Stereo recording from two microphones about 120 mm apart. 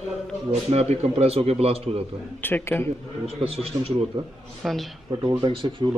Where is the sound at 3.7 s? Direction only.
45° right (ahead or behind).